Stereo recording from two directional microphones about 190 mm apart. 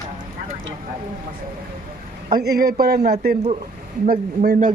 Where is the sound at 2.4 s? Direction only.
55° right (ahead or behind).